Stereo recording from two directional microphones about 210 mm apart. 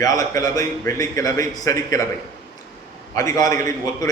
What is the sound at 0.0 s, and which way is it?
A man's voice, 15° left (ahead or behind).